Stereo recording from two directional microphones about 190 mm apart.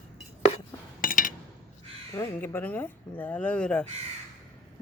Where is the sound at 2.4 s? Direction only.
10° left (ahead or behind).